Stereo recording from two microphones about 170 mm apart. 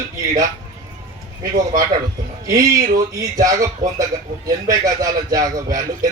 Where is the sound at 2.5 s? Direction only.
20° right (ahead or behind).